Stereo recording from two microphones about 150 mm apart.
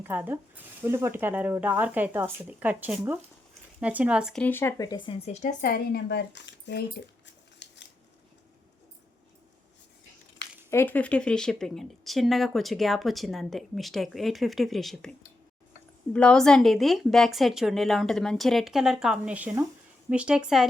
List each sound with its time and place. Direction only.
0.0 s speech: 15° right (ahead or behind)
4.4 s speech: 15° left (ahead or behind)
4.8 s speech: 30° left (ahead or behind); by 5.5 s 50° left (ahead or behind)
5.6 s speech: 90° left
10.7 s a woman's voice: 15° left (ahead or behind)
16.1 s a woman's voice: 5° left (ahead or behind)